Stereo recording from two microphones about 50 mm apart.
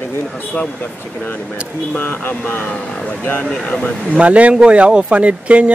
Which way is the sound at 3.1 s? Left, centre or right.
Left.